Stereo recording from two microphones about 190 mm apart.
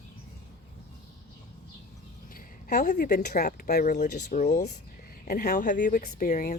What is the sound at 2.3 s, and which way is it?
Speech, 50° left (ahead or behind).